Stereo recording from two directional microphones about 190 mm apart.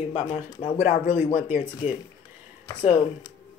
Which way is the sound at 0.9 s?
40° left (ahead or behind).